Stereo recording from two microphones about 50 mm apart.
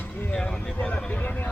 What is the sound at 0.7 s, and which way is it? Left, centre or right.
Speech, left.